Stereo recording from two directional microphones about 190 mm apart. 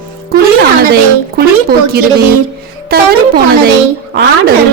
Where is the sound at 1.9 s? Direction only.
55° right (ahead or behind).